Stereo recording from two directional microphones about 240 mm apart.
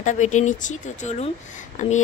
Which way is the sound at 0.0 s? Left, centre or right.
Left.